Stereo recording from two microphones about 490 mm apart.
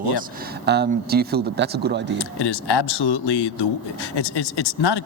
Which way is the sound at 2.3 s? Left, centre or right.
Left.